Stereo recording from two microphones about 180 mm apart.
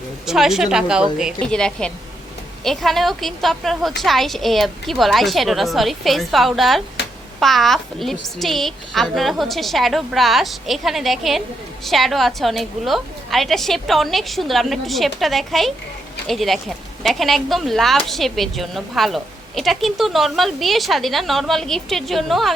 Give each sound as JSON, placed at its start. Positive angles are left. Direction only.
{"t": 0.3, "sound": "speech", "side_deg": 0}